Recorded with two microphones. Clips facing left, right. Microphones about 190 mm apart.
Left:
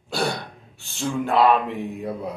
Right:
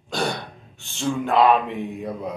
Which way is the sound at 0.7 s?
5° left (ahead or behind).